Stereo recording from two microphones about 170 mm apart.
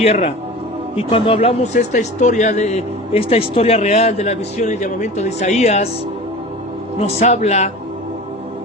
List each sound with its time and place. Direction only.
0.0 s speech: 35° left (ahead or behind)
7.2 s speech: 40° left (ahead or behind)